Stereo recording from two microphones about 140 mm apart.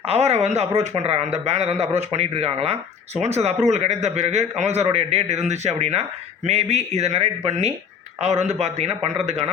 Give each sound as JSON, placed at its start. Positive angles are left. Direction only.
{"t": 0.0, "sound": "a man's voice", "side_deg": -50}